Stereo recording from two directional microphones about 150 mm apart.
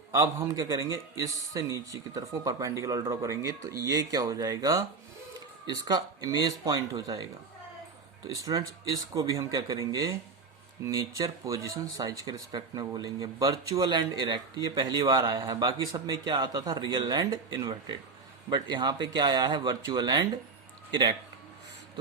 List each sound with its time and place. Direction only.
0.1 s speech: 20° right (ahead or behind)
8.3 s speech: 25° right (ahead or behind)